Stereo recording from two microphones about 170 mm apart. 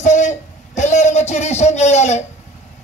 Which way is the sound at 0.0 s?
45° left (ahead or behind).